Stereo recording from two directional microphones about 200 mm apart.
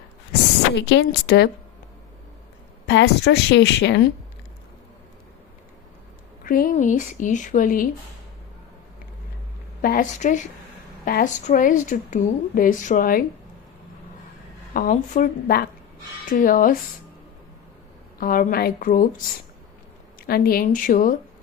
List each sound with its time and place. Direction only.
0.8 s a woman's voice: 60° left (ahead or behind)
2.8 s a woman's voice: 60° left (ahead or behind)
6.4 s speech: 45° left (ahead or behind)
9.8 s speech: 45° left (ahead or behind)
14.7 s speech: 45° left (ahead or behind)
18.2 s speech: 45° left (ahead or behind)
20.2 s speech: 50° left (ahead or behind)